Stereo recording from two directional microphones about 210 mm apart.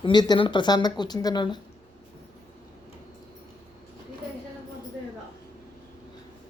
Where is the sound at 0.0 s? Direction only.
20° left (ahead or behind).